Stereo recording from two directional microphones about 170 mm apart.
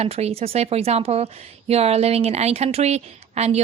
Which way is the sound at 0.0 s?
40° right (ahead or behind).